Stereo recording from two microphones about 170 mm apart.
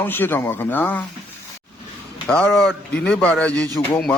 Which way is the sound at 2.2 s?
5° left (ahead or behind).